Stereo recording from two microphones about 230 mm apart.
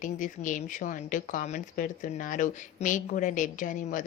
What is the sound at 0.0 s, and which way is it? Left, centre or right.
Speech, left.